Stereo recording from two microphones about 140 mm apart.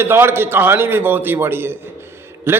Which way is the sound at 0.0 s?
15° right (ahead or behind).